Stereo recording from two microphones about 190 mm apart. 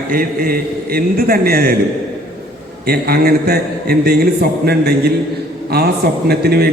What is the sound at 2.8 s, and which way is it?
A man's voice, 55° right (ahead or behind).